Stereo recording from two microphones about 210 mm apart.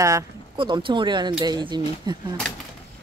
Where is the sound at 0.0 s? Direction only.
20° right (ahead or behind).